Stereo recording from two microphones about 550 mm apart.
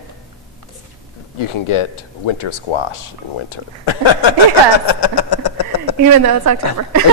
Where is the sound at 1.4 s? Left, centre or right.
Left.